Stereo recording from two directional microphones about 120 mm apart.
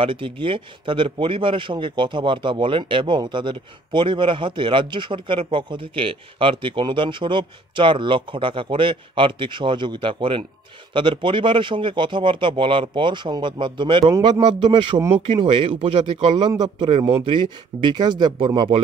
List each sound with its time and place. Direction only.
0.0 s speech: 45° right (ahead or behind)